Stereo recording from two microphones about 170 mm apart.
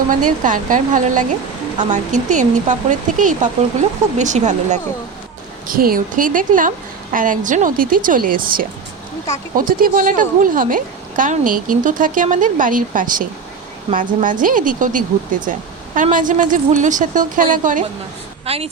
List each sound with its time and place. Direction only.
0.1 s speech: 50° right (ahead or behind)
5.6 s speech: 55° right (ahead or behind)
18.4 s a woman's voice: 35° right (ahead or behind)